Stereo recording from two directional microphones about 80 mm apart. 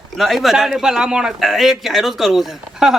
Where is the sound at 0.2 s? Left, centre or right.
Centre.